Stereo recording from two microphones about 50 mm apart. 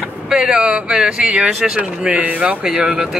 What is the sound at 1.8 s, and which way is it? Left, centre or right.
Speech, right.